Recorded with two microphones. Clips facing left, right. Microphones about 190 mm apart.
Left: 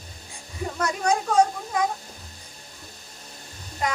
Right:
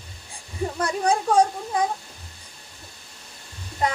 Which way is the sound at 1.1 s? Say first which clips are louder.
Right 1 dB; 30° right (ahead or behind).